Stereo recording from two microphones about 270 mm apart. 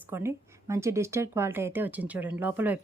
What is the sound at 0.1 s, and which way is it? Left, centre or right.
Speech, centre.